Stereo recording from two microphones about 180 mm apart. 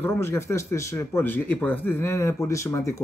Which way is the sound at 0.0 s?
15° left (ahead or behind).